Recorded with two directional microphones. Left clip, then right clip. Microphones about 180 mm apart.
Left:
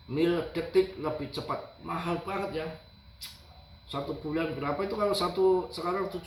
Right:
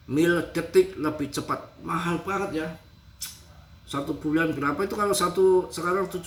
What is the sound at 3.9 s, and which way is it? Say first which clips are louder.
Speech: right 6 dB; 5° right (ahead or behind).